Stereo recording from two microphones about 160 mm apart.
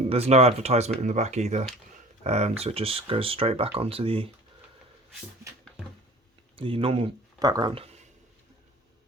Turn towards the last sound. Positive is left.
turn(degrees=-40)  # may be behind; listen again after turning